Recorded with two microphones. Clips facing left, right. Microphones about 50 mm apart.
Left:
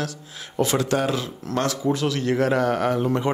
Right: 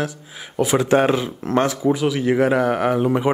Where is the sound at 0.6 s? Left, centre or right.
Centre.